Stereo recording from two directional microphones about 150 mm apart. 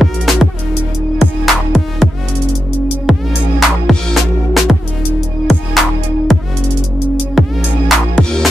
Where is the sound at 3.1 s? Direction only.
Centre (ahead or behind).